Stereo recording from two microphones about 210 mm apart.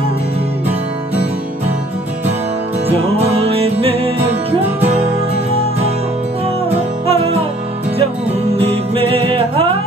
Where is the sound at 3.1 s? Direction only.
30° right (ahead or behind).